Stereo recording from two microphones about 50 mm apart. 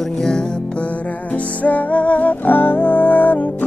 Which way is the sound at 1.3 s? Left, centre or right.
Left.